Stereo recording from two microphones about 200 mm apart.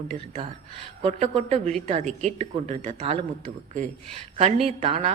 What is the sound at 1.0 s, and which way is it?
Speech, 35° right (ahead or behind).